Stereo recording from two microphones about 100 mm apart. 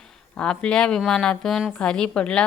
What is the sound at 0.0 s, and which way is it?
Speech, 5° left (ahead or behind).